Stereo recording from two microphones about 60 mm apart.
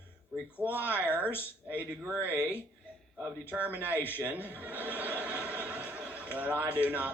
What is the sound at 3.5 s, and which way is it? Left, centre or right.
A man's voice, right.